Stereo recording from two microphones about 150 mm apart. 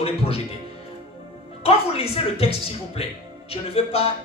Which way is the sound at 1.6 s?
40° left (ahead or behind).